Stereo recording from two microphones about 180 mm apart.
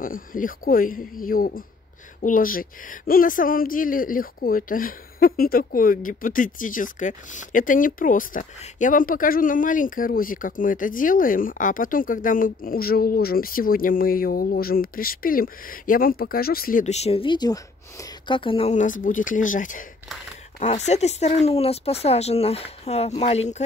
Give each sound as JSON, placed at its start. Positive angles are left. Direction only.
{"t": 0.0, "sound": "a man's voice", "side_deg": 50}